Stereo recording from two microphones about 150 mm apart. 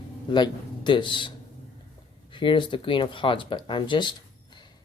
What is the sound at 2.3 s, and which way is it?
Speech, 35° left (ahead or behind).